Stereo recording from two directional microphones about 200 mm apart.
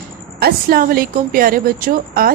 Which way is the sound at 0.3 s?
50° right (ahead or behind).